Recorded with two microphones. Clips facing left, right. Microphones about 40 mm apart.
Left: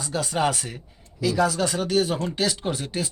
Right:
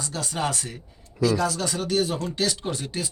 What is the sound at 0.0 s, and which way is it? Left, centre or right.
Speech, centre.